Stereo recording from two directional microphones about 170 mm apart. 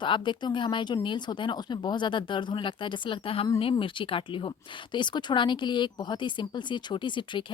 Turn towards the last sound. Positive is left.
turn(degrees=30)  # may be behind; listen again after turning